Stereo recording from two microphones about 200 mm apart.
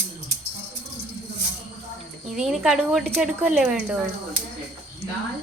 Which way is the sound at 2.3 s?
Centre (ahead or behind).